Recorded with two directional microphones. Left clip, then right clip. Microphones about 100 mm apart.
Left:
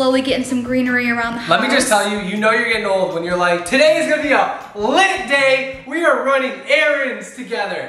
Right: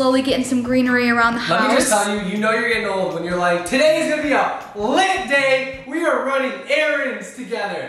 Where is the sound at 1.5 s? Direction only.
15° left (ahead or behind).